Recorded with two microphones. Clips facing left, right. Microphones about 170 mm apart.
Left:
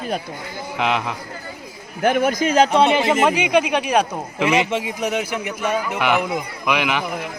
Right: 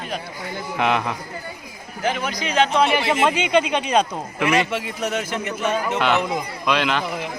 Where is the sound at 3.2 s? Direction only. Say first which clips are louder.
Left 2 dB; 10° left (ahead or behind).